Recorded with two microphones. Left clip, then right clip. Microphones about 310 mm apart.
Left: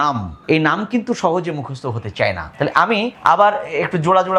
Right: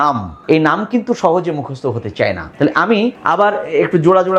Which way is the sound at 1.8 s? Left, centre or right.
Left.